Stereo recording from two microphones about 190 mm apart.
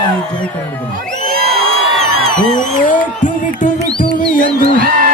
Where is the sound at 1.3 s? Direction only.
55° right (ahead or behind).